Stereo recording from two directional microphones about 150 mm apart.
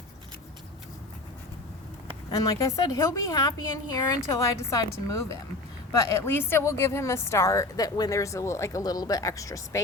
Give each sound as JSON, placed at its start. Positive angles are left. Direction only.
{"t": 2.0, "sound": "a woman's voice", "side_deg": 20}